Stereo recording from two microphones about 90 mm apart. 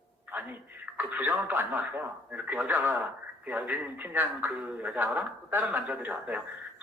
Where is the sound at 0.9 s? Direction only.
20° right (ahead or behind).